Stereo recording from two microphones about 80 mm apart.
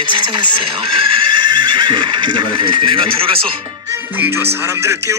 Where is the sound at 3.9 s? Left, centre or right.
Right.